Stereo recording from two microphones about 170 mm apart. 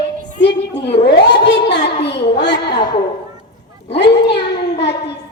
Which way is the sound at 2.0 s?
85° left.